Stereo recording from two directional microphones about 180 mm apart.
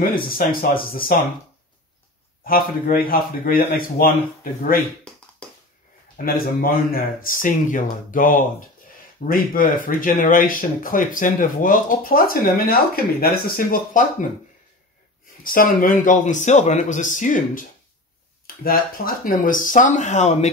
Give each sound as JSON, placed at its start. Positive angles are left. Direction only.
{"t": 0.0, "sound": "speech", "side_deg": 55}
{"t": 2.4, "sound": "speech", "side_deg": 55}
{"t": 6.2, "sound": "speech", "side_deg": 55}
{"t": 15.4, "sound": "speech", "side_deg": 55}